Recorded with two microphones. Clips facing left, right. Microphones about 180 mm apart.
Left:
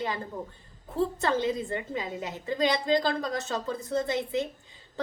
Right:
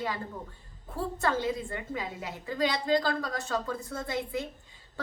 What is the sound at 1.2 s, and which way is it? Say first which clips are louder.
A woman's voice: left 2 dB; 20° left (ahead or behind).